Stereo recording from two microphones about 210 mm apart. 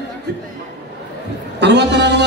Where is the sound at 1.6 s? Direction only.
55° right (ahead or behind).